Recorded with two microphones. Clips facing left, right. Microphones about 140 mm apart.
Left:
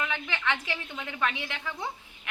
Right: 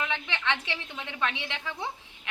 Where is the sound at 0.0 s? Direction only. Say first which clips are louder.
Even; 20° right (ahead or behind).